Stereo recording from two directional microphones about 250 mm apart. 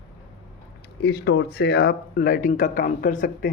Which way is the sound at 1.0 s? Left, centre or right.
Left.